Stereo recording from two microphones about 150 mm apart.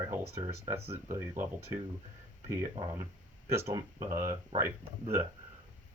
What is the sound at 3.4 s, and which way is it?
Speech, 20° right (ahead or behind).